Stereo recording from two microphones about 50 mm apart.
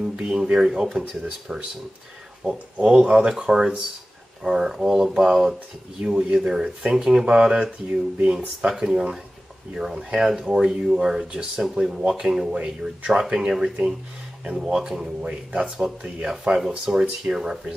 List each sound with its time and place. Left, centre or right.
0.1 s speech: centre
2.4 s speech: centre
3.1 s speech: centre
8.5 s speech: centre
12.3 s speech: centre
12.5 s speech: right
15.2 s speech: right
16.4 s speech: centre